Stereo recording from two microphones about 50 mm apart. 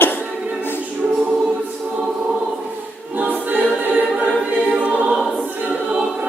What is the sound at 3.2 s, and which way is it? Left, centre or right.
Choir, right.